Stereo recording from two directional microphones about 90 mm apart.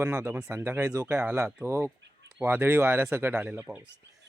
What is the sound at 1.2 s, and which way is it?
Speech, 25° right (ahead or behind).